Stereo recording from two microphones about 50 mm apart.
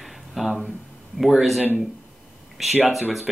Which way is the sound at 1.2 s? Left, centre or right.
Centre.